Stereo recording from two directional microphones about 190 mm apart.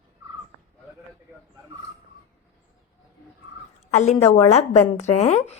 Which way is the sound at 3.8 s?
35° left (ahead or behind).